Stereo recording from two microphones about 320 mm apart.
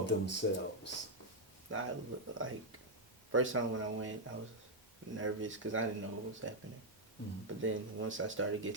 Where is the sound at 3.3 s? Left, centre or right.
Right.